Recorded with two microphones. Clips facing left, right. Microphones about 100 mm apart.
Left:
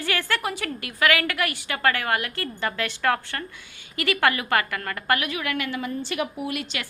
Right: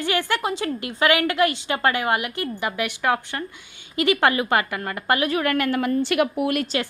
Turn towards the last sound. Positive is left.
turn(degrees=-30)  # may be behind; listen again after turning